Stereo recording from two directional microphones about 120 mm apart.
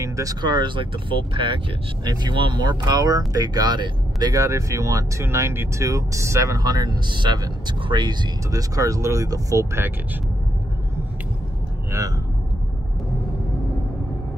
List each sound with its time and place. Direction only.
0.0 s speech: 30° right (ahead or behind)